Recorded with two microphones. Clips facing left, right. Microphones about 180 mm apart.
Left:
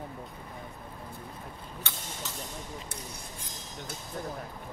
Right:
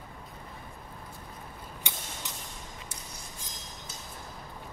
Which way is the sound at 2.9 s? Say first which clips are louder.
Left 3 dB; 60° left (ahead or behind).